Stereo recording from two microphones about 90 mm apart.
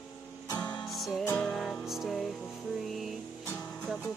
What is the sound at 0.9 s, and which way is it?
Music, centre (ahead or behind).